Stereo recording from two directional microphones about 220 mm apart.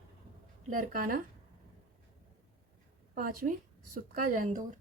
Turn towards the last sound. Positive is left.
turn(degrees=-35)  # may be behind; listen again after turning